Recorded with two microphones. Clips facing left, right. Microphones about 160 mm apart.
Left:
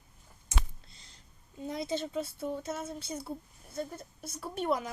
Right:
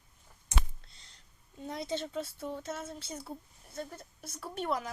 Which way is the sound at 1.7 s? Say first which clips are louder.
Left 2 dB; 10° left (ahead or behind).